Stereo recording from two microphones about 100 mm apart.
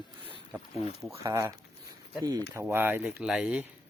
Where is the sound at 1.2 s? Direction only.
30° right (ahead or behind).